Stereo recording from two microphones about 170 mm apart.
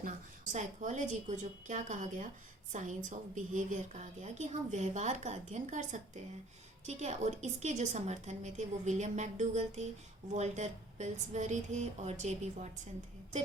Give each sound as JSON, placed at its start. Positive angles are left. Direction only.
{"t": 0.5, "sound": "a woman's voice", "side_deg": -45}